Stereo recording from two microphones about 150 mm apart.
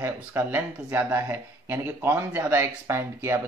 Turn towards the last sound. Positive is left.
turn(degrees=-15)  # may be behind; listen again after turning